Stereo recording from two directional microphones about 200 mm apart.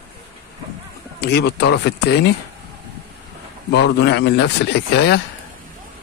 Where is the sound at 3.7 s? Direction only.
60° left (ahead or behind).